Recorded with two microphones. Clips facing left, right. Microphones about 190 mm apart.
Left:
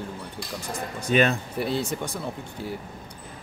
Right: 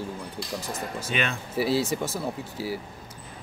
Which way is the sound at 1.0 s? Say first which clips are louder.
Left 9 dB; 40° left (ahead or behind).